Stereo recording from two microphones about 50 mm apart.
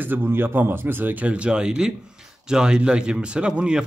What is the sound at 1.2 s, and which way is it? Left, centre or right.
A man's voice, right.